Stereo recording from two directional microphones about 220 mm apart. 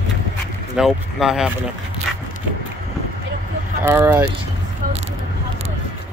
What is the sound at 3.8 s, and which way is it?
Speech, 10° right (ahead or behind).